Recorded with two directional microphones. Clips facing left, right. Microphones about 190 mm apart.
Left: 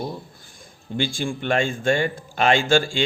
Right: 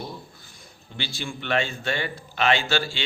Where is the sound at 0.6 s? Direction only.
50° left (ahead or behind).